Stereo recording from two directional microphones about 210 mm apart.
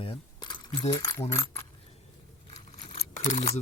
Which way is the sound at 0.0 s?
25° left (ahead or behind).